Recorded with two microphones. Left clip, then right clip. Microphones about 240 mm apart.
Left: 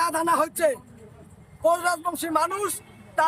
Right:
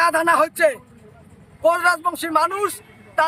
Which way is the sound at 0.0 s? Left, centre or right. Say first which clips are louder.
Right 6 dB; centre.